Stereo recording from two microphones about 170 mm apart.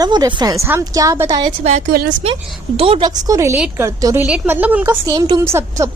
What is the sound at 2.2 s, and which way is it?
Speech, 35° right (ahead or behind).